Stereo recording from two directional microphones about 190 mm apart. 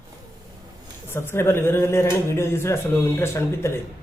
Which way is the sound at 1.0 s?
10° left (ahead or behind).